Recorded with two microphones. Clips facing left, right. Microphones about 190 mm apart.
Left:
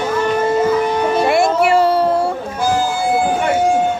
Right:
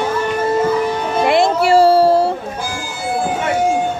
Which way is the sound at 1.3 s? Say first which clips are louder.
Right 3 dB; 30° right (ahead or behind).